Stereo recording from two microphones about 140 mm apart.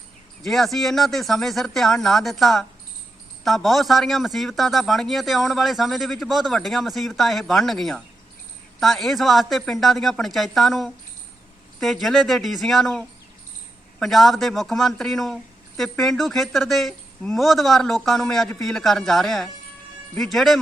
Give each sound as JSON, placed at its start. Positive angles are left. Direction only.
{"t": 0.4, "sound": "a man's voice", "side_deg": 0}